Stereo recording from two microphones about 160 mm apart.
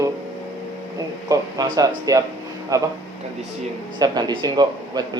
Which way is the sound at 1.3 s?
25° right (ahead or behind).